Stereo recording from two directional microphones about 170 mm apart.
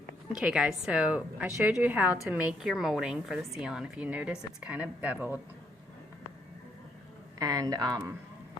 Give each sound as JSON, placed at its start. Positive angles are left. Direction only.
{"t": 0.3, "sound": "a woman's voice", "side_deg": -5}
{"t": 7.3, "sound": "speech", "side_deg": -20}